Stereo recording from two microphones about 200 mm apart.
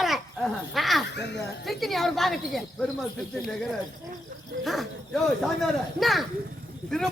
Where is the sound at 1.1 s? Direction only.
60° left (ahead or behind).